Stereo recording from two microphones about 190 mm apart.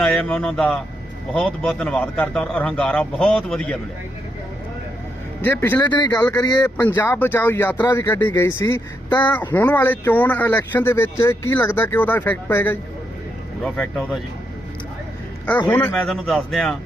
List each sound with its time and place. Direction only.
0.0 s speech: 5° left (ahead or behind)
5.4 s speech: 10° left (ahead or behind)
5.9 s speech: 20° left (ahead or behind)
6.7 s speech: 10° left (ahead or behind)
15.7 s speech: 10° left (ahead or behind)